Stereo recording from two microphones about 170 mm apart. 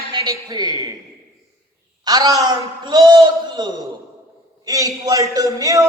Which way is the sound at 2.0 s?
20° right (ahead or behind).